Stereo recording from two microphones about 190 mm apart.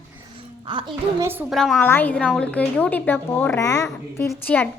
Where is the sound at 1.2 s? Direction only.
10° right (ahead or behind).